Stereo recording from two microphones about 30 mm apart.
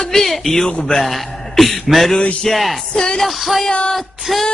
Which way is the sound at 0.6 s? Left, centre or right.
Left.